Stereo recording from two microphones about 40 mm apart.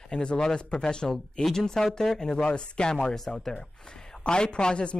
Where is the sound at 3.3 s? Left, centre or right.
Centre.